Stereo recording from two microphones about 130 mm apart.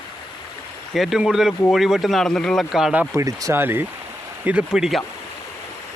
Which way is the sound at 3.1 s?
25° right (ahead or behind).